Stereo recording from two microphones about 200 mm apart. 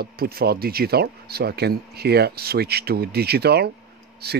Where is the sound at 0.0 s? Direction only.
50° right (ahead or behind).